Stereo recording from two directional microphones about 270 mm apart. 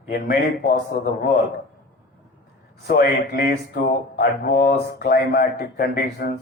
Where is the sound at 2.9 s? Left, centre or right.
Left.